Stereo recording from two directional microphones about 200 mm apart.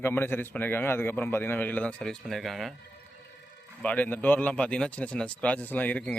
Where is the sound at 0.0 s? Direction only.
10° left (ahead or behind).